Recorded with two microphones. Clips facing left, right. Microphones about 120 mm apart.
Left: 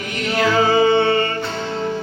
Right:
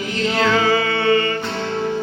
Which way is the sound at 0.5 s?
30° left (ahead or behind).